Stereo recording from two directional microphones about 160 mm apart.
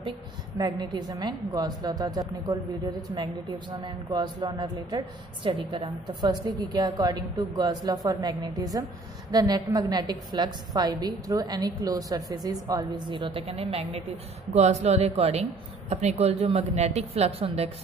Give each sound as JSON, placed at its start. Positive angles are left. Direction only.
{"t": 0.6, "sound": "a woman's voice", "side_deg": -30}